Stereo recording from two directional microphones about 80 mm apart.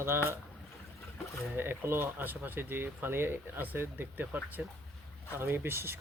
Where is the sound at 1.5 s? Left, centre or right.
Right.